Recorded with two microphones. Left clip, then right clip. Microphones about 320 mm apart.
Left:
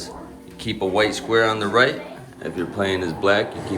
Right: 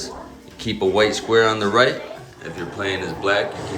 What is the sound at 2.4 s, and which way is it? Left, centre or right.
A man's voice, centre.